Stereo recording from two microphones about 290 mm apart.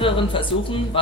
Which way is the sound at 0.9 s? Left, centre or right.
Centre.